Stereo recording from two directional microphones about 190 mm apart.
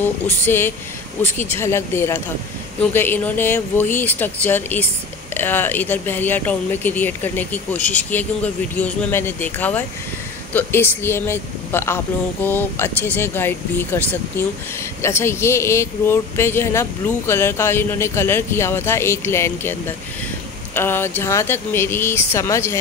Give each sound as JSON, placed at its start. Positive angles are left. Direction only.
{"t": 0.0, "sound": "speech", "side_deg": 10}